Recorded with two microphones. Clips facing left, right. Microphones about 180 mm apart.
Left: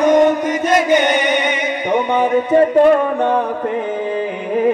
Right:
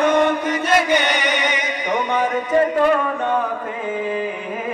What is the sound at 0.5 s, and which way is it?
Chant, 45° left (ahead or behind).